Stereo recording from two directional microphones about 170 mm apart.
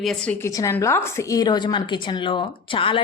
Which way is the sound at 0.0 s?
Centre (ahead or behind).